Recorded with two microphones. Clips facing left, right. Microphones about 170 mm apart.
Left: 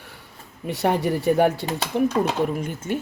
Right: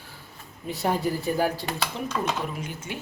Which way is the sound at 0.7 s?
70° left (ahead or behind).